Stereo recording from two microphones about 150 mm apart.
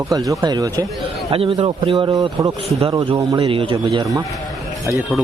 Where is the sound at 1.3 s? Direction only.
40° right (ahead or behind).